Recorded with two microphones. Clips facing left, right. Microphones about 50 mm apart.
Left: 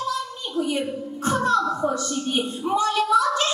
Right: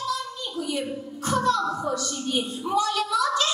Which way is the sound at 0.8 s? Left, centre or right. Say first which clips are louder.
Left 4 dB; left.